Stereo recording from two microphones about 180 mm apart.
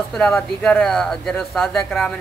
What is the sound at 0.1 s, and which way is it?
Speech, 5° left (ahead or behind).